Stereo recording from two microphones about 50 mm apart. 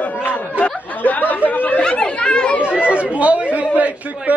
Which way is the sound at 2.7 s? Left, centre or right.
Right.